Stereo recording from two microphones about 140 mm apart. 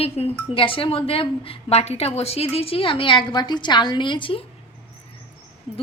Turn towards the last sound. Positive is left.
turn(degrees=35)  # may be behind; listen again after turning